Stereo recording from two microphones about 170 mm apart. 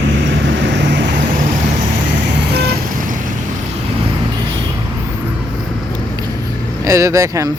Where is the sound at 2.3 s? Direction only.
85° right; by 3.2 s 50° right (ahead or behind).